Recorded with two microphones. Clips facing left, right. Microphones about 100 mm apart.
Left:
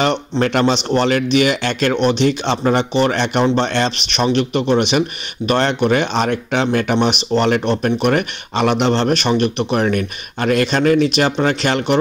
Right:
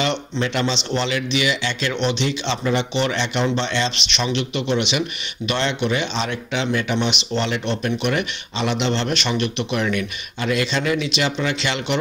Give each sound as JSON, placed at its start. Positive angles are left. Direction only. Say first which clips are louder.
{"t": 0.0, "sound": "speech", "louder": "left 6 dB", "side_deg": 50}